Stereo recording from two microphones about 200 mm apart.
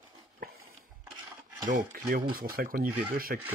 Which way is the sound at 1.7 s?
45° right (ahead or behind).